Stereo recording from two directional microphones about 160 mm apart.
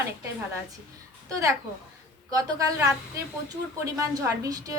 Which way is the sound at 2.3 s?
20° right (ahead or behind).